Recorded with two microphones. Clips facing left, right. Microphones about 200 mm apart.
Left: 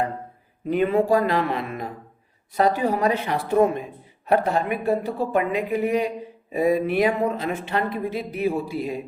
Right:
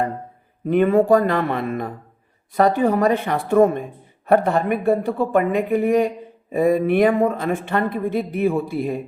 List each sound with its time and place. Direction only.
0.7 s speech: 50° right (ahead or behind)